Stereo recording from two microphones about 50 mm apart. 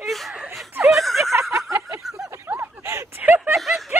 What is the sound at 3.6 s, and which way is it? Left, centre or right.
Snicker, centre.